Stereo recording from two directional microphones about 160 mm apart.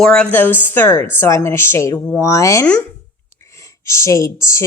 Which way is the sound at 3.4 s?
20° left (ahead or behind).